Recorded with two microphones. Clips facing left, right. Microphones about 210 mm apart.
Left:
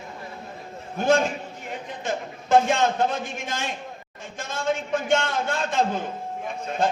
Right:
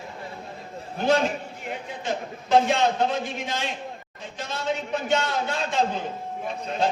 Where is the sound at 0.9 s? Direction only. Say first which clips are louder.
Left 1 dB; 50° left (ahead or behind).